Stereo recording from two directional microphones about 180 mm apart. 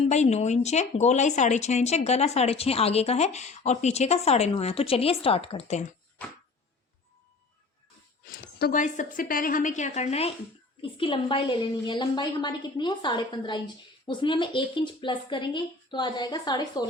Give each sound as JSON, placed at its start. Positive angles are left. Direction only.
{"t": 0.1, "sound": "speech", "side_deg": 40}
{"t": 8.3, "sound": "a woman's voice", "side_deg": 60}